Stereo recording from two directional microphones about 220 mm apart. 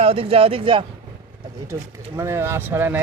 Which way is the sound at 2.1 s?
10° right (ahead or behind).